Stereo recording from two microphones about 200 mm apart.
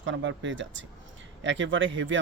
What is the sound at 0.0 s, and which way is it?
Speech, 65° right (ahead or behind).